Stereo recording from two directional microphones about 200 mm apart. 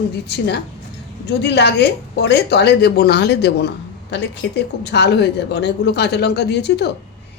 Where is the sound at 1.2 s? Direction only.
60° left (ahead or behind).